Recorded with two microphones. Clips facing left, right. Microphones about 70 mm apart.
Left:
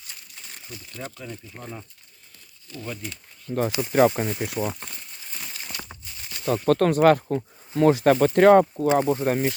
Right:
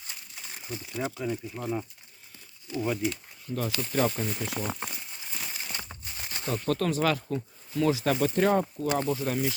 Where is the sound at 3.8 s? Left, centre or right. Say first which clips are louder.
Left 9 dB; left.